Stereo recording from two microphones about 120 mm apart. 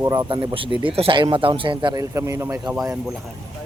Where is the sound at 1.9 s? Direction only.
25° right (ahead or behind).